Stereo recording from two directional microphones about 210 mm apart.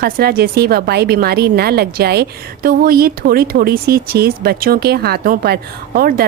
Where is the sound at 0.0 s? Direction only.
45° right (ahead or behind).